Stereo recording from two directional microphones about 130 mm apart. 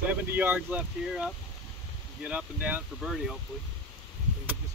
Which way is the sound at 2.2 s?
10° right (ahead or behind).